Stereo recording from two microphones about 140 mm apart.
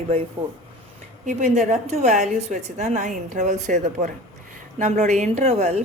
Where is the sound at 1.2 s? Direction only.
60° right (ahead or behind).